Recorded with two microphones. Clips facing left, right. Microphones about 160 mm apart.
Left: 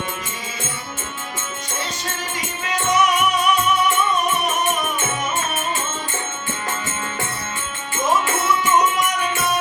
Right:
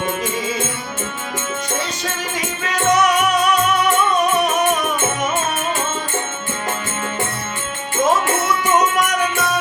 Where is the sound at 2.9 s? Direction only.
80° right.